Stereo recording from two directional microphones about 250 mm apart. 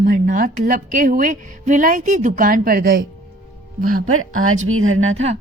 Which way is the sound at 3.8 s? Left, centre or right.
Right.